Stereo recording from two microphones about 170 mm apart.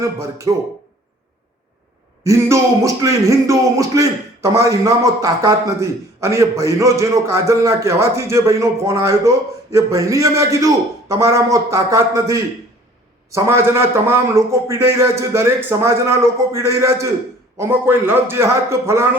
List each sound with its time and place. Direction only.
0.0 s speech: 20° right (ahead or behind)
2.2 s a man's voice: 15° right (ahead or behind)